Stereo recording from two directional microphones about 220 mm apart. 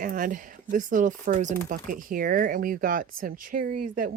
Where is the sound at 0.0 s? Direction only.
40° right (ahead or behind).